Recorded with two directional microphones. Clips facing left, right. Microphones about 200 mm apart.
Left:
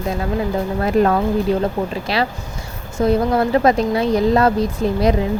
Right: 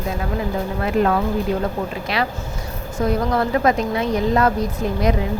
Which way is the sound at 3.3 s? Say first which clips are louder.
Left 3 dB; 30° left (ahead or behind).